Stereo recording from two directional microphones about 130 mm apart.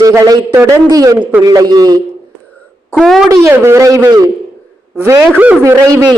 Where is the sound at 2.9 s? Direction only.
5° left (ahead or behind).